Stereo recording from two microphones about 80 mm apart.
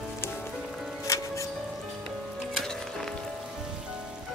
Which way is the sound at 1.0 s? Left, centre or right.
Left.